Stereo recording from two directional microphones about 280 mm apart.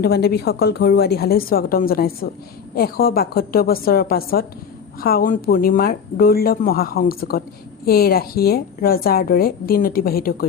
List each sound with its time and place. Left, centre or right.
0.0 s a woman's voice: left